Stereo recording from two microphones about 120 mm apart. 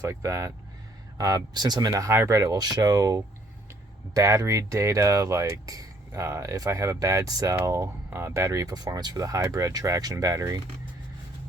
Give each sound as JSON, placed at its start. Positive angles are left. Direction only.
{"t": 0.0, "sound": "speech", "side_deg": -25}